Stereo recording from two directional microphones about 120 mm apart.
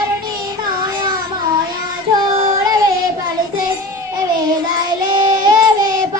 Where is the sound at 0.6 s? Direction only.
35° right (ahead or behind).